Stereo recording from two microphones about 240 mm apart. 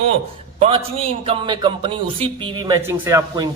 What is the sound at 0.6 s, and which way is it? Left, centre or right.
Speech, right.